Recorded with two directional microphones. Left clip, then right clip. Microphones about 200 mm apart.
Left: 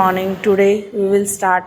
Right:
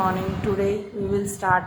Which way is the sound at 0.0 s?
35° left (ahead or behind).